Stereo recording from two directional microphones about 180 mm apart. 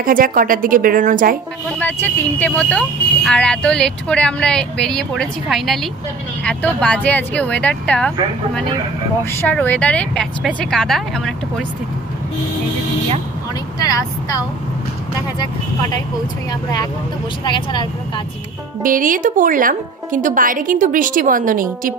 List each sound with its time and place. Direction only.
0.0 s a woman's voice: 50° right (ahead or behind)
1.8 s speech: 10° left (ahead or behind)
9.4 s speech: 10° left (ahead or behind)
17.5 s speech: 25° left (ahead or behind)
18.8 s a woman's voice: 50° right (ahead or behind)